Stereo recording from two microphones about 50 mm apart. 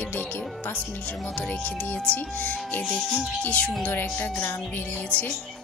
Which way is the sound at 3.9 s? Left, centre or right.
Left.